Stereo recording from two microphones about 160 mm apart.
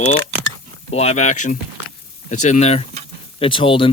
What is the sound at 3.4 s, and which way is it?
Speech, 35° left (ahead or behind).